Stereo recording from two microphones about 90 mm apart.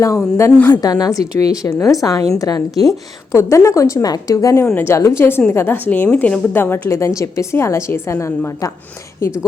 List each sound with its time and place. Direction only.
0.0 s a woman's voice: 35° left (ahead or behind)
0.7 s a woman's voice: 45° left (ahead or behind)
4.7 s a woman's voice: 25° left (ahead or behind)
6.6 s a woman's voice: 25° left (ahead or behind)